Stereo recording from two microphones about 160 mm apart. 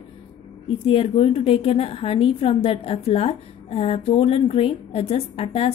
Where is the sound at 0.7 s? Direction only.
35° left (ahead or behind).